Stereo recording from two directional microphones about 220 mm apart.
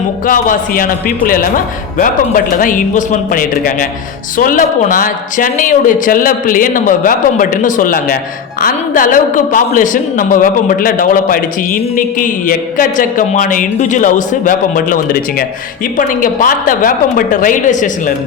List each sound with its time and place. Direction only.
0.3 s a woman's voice: 40° left (ahead or behind)